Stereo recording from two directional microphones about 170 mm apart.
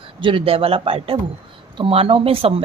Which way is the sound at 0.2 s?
30° right (ahead or behind).